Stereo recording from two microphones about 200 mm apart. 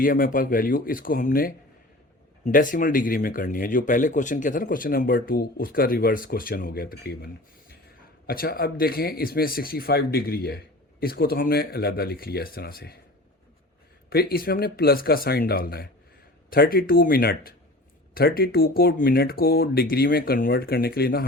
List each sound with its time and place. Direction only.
0.0 s speech: 45° left (ahead or behind)
8.3 s speech: 50° left (ahead or behind)
14.1 s speech: 50° left (ahead or behind)